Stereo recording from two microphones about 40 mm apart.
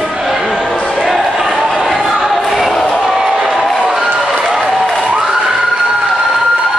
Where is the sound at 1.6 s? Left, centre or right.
Centre.